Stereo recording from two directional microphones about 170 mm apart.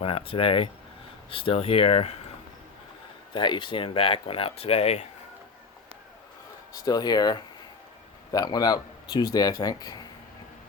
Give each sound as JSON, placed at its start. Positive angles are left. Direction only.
{"t": 0.0, "sound": "speech", "side_deg": 35}
{"t": 3.3, "sound": "speech", "side_deg": 25}
{"t": 6.7, "sound": "speech", "side_deg": 25}